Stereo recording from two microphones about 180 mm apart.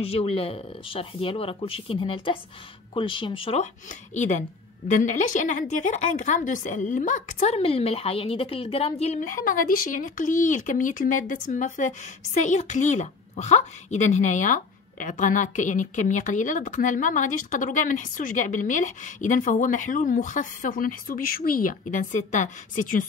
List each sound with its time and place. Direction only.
0.0 s speech: 30° left (ahead or behind)
4.1 s a woman's voice: 40° left (ahead or behind)